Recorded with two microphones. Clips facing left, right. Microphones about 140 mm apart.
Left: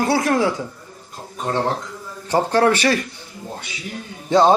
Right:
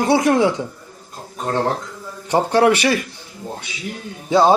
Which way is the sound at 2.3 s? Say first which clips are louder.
Right 2 dB; 15° right (ahead or behind).